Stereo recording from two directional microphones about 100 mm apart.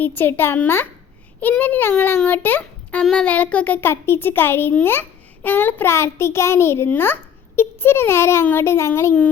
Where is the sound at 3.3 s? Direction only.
15° left (ahead or behind).